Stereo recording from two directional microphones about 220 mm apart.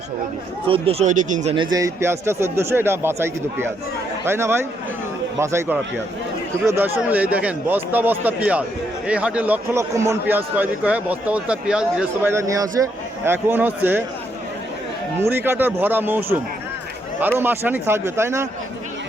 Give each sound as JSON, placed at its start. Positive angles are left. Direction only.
{"t": 0.7, "sound": "speech", "side_deg": -25}
{"t": 1.5, "sound": "a man's voice", "side_deg": -15}
{"t": 15.2, "sound": "a man's voice", "side_deg": -10}